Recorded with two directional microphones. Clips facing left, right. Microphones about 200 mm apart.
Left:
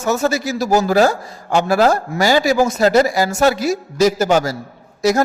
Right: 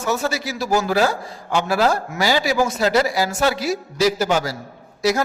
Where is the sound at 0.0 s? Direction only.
45° left (ahead or behind).